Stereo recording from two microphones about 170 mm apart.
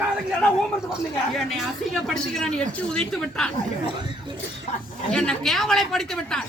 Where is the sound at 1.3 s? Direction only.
Centre (ahead or behind).